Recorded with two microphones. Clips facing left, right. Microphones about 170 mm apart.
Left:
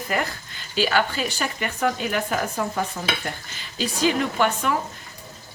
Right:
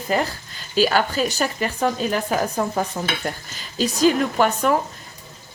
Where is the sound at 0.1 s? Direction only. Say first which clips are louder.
Right 4 dB; 30° right (ahead or behind).